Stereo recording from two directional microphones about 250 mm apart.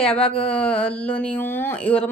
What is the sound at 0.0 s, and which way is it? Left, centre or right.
Speech, centre.